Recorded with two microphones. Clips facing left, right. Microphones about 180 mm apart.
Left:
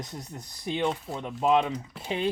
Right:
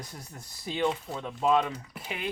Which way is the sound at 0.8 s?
Centre (ahead or behind).